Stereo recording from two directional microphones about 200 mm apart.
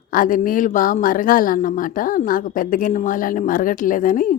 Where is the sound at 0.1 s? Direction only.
45° left (ahead or behind).